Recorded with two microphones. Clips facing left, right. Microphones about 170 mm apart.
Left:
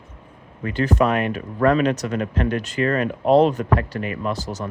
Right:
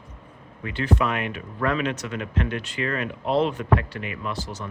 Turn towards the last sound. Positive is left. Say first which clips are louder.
# left 6 dB
turn(degrees=40)  # may be behind; listen again after turning